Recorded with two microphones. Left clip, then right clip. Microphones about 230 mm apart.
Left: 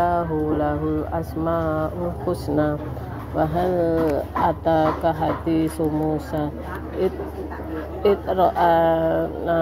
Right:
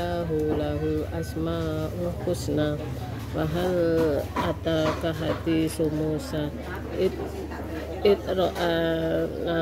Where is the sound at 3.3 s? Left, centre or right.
Centre.